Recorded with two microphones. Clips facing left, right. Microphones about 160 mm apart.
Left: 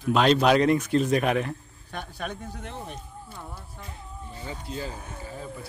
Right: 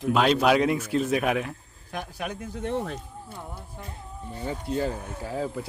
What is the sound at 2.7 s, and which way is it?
Speech, 75° right (ahead or behind).